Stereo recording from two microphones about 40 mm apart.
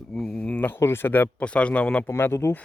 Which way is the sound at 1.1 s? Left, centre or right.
Left.